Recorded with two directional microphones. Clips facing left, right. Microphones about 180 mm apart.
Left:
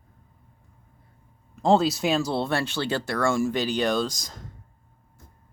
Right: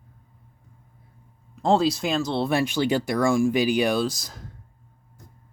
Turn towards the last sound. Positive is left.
turn(degrees=-5)  # may be behind; listen again after turning